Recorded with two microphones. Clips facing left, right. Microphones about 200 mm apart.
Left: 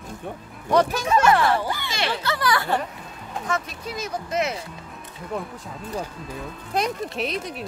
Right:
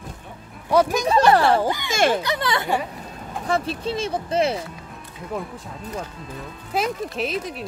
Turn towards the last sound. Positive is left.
turn(degrees=0)  # may be behind; listen again after turning